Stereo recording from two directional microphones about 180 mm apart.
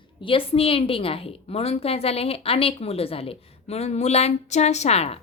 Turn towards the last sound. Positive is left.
turn(degrees=35)  # may be behind; listen again after turning